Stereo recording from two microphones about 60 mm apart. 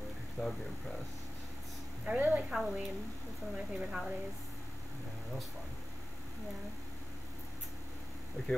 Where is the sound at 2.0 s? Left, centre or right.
Right.